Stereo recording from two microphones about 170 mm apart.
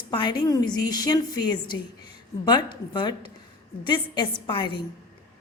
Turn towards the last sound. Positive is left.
turn(degrees=30)  # may be behind; listen again after turning